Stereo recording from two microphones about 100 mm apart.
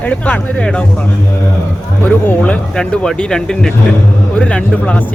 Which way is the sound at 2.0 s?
15° left (ahead or behind).